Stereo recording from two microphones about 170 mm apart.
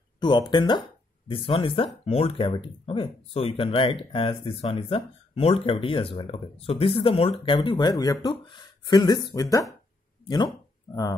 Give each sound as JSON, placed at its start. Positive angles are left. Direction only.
{"t": 0.2, "sound": "speech", "side_deg": 25}